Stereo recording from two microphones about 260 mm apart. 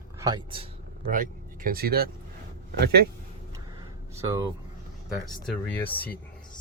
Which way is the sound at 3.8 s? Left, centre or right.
Centre.